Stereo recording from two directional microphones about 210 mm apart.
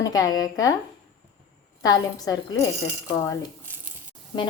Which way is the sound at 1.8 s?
20° left (ahead or behind).